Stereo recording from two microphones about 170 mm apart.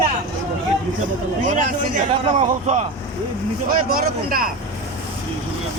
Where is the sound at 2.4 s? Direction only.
40° right (ahead or behind).